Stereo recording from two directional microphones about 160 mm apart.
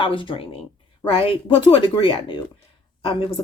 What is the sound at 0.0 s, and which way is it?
Speech, 30° left (ahead or behind).